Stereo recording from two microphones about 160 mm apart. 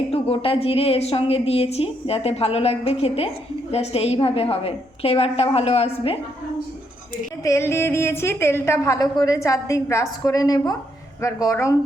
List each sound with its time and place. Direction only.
0.1 s a woman's voice: 35° left (ahead or behind)
7.4 s a woman's voice: 15° left (ahead or behind)